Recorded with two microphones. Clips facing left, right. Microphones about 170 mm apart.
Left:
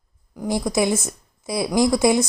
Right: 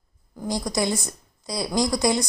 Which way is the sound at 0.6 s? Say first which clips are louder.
Left 5 dB; 5° left (ahead or behind).